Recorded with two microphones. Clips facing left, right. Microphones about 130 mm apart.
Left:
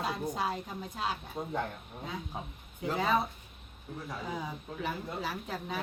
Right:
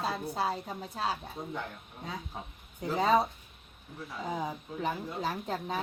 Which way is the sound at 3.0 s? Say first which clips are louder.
Right 4 dB; 35° right (ahead or behind).